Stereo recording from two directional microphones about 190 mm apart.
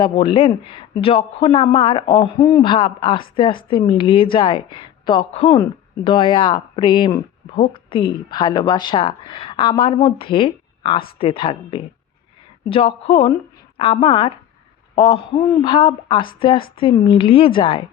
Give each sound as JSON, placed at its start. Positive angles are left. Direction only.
{"t": 0.0, "sound": "speech", "side_deg": 25}